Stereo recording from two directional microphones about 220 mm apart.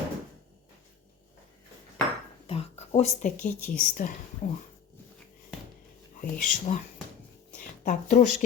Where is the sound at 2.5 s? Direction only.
25° left (ahead or behind).